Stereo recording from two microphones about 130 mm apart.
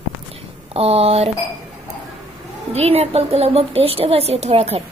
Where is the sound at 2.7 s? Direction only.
55° right (ahead or behind).